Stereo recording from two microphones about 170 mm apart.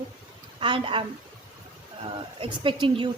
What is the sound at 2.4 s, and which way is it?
Speech, 30° right (ahead or behind).